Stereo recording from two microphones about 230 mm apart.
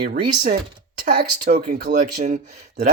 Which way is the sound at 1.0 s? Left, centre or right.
Right.